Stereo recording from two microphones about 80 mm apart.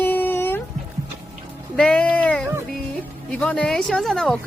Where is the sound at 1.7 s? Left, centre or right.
Centre.